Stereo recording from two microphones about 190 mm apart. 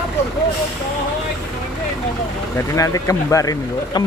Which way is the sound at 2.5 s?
15° left (ahead or behind).